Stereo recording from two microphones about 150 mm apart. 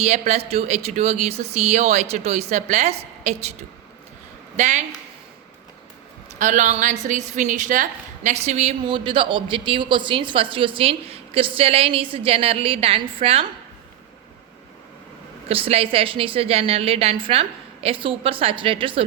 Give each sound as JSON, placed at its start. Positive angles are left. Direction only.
{"t": 0.0, "sound": "speech", "side_deg": -45}
{"t": 4.5, "sound": "a woman's voice", "side_deg": -50}
{"t": 6.4, "sound": "a woman's voice", "side_deg": -55}
{"t": 8.9, "sound": "speech", "side_deg": -35}
{"t": 15.4, "sound": "speech", "side_deg": -40}